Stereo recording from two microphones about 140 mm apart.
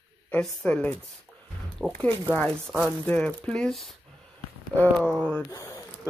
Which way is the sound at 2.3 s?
10° left (ahead or behind).